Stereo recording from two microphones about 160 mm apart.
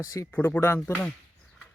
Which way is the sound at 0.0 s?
20° left (ahead or behind).